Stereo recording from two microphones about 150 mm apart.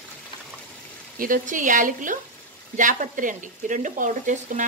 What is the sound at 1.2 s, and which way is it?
Speech, 60° right (ahead or behind).